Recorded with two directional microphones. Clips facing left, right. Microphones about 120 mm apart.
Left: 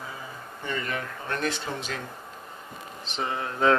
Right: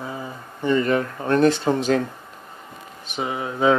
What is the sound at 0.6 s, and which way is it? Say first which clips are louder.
Speech: right 12 dB; 35° right (ahead or behind).